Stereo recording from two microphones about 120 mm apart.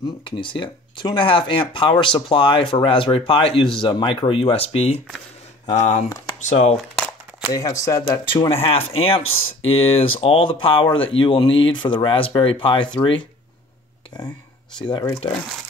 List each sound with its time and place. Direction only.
0.2 s speech: 45° left (ahead or behind)
5.7 s speech: 75° left (ahead or behind)
7.5 s speech: 30° left (ahead or behind)
8.3 s speech: 45° left (ahead or behind)
14.9 s speech: 35° left (ahead or behind)